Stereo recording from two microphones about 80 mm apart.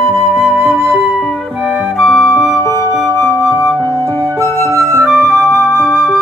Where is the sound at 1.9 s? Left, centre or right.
Centre.